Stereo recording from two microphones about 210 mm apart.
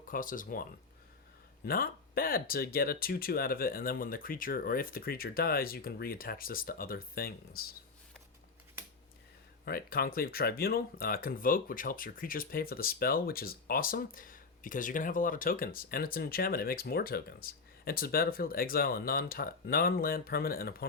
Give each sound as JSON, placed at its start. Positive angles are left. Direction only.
{"t": 0.1, "sound": "speech", "side_deg": 40}
{"t": 9.6, "sound": "speech", "side_deg": 45}